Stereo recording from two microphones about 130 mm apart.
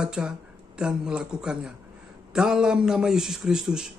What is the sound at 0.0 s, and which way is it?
A man's voice, 5° right (ahead or behind).